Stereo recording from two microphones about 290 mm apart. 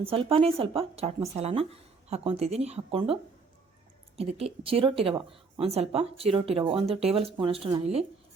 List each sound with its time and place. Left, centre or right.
0.0 s speech: centre
4.2 s speech: right